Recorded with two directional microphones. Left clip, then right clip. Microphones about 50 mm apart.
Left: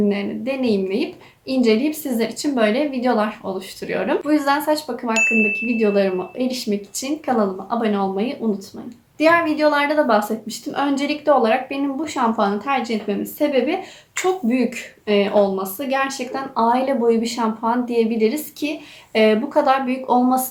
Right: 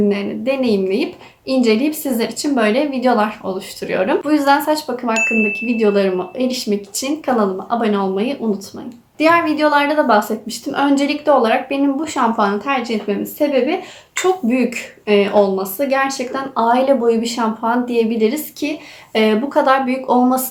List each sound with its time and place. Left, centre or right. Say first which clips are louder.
0.1 s a woman's voice: right 5 dB; centre; by 5.1 s right
5.1 s a sound: even; centre
5.6 s speech: right 3 dB; right
9.1 s a woman's voice: right 2 dB; right
14.2 s speech: right 3 dB; right
16.3 s speech: right 2 dB; right
20.1 s speech: right 2 dB; right